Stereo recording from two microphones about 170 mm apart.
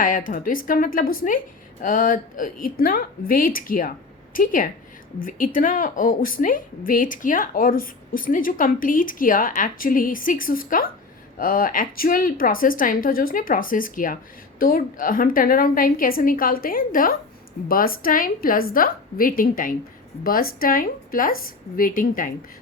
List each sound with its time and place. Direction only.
0.0 s a woman's voice: 50° left (ahead or behind)